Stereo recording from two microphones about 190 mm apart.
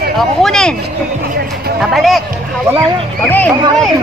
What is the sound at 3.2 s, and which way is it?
Speech, 10° left (ahead or behind).